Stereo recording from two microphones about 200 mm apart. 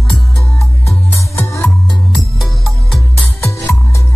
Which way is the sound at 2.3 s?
Centre (ahead or behind).